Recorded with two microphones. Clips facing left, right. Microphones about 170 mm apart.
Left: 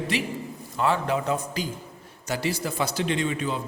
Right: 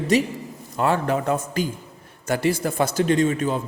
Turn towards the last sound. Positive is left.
turn(degrees=-45)  # may be behind; listen again after turning